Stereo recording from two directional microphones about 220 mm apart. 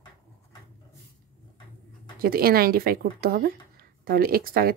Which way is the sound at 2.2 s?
45° right (ahead or behind).